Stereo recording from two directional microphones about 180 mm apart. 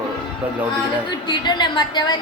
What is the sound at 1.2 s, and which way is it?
Speech, 25° left (ahead or behind).